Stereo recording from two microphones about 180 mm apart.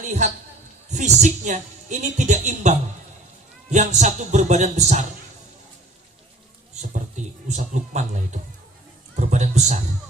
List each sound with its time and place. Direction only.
0.0 s a man's voice: 45° right (ahead or behind)
6.9 s speech: 40° right (ahead or behind)